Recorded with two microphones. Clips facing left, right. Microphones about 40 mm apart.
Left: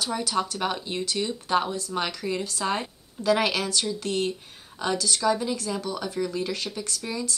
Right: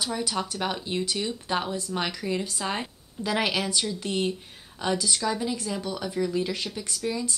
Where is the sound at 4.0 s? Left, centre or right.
Centre.